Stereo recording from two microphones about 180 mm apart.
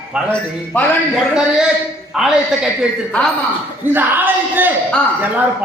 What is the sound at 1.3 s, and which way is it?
A man's voice, 5° right (ahead or behind).